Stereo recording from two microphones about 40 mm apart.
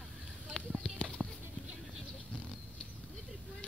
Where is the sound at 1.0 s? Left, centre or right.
Left.